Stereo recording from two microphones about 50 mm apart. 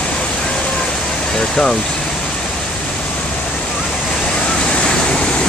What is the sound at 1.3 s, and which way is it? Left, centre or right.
Vehicle, centre.